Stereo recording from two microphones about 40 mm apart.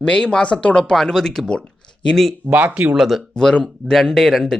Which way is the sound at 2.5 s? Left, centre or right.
Right.